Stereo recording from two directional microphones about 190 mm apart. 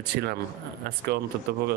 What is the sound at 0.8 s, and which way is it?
Speech, 50° right (ahead or behind).